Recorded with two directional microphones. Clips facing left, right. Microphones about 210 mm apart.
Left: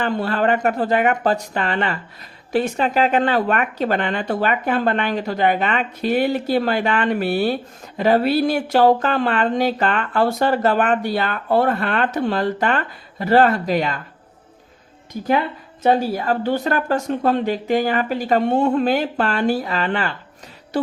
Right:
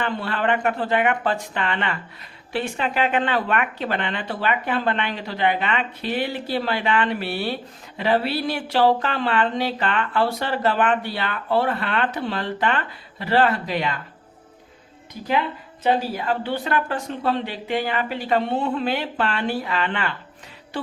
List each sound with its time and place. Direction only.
0.0 s speech: 40° left (ahead or behind)
15.8 s speech: 45° left (ahead or behind)